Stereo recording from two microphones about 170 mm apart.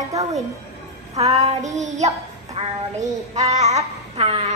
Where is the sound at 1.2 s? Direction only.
40° right (ahead or behind).